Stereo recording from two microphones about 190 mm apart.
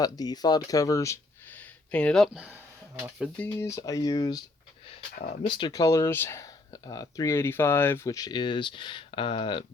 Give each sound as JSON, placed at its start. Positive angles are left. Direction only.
{"t": 0.0, "sound": "speech", "side_deg": 20}
{"t": 3.3, "sound": "speech", "side_deg": 10}
{"t": 5.5, "sound": "speech", "side_deg": 25}